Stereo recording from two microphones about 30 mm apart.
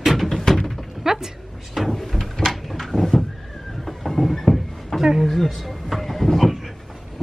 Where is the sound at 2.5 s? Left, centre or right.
Centre.